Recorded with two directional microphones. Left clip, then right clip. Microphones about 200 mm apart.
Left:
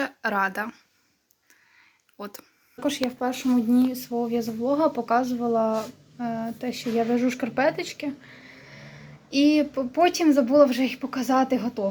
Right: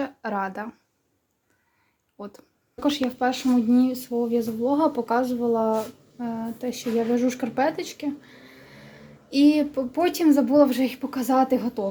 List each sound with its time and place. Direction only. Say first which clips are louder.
0.0 s speech: left 3 dB; 5° right (ahead or behind)
2.1 s speech: left 1 dB; 5° right (ahead or behind)